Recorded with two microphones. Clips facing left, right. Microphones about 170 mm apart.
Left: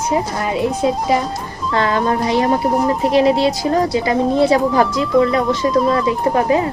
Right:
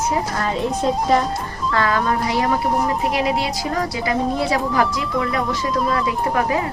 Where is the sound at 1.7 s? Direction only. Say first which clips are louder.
Left 3 dB; 25° left (ahead or behind).